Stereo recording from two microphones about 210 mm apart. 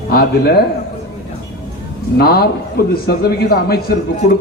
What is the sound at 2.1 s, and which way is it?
A man's voice, 50° left (ahead or behind).